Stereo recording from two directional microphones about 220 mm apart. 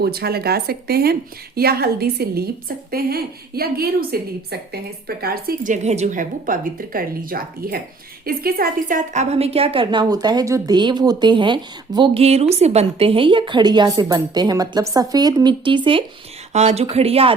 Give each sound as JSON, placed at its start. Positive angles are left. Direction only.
{"t": 0.0, "sound": "a woman's voice", "side_deg": -45}